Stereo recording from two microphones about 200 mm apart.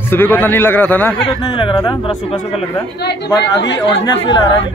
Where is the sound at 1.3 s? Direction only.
25° left (ahead or behind).